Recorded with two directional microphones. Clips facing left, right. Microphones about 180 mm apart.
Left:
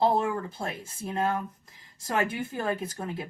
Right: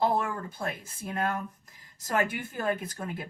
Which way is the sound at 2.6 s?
25° left (ahead or behind).